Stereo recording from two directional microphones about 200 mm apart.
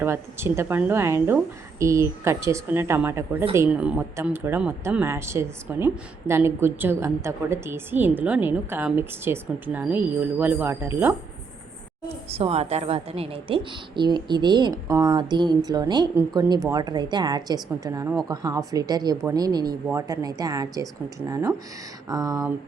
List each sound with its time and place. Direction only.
0.0 s speech: 10° right (ahead or behind)
12.3 s a woman's voice: 30° right (ahead or behind)